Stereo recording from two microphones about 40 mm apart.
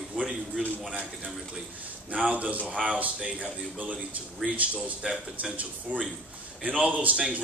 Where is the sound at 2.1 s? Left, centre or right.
Right.